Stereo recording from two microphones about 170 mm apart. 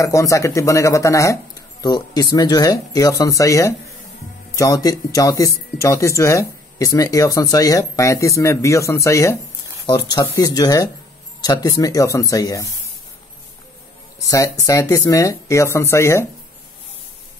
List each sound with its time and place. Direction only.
0.0 s speech: 20° left (ahead or behind)
14.3 s speech: 20° left (ahead or behind)